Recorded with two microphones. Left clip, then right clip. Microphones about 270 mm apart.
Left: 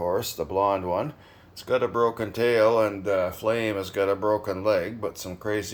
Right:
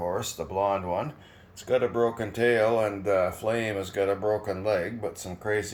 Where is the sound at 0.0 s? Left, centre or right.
Centre.